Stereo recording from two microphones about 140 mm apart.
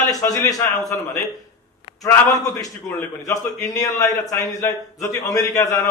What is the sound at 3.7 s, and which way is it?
A man's voice, 25° left (ahead or behind).